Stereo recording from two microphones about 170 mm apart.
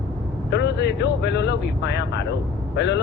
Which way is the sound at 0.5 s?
90° left.